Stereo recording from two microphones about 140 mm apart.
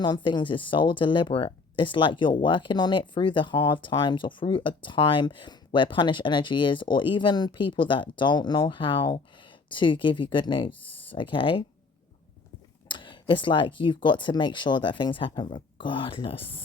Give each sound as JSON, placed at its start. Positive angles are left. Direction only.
{"t": 0.0, "sound": "speech", "side_deg": 35}
{"t": 12.9, "sound": "speech", "side_deg": 35}